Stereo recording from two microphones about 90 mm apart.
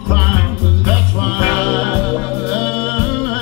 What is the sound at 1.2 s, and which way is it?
Music, 10° left (ahead or behind).